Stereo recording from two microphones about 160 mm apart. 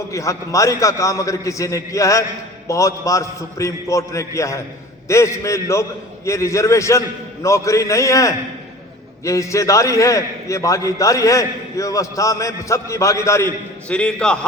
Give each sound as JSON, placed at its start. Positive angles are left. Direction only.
{"t": 0.1, "sound": "a man's voice", "side_deg": 20}